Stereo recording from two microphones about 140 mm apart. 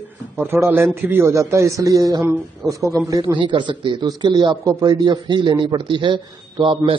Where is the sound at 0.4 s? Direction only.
15° right (ahead or behind).